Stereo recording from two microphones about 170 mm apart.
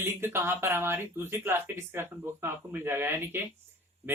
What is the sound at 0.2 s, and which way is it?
Speech, 15° right (ahead or behind).